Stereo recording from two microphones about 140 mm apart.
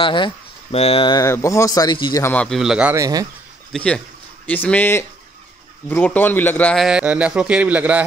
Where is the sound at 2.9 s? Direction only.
25° right (ahead or behind).